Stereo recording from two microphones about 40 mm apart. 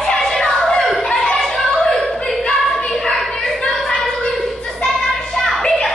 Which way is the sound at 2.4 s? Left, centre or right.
Centre.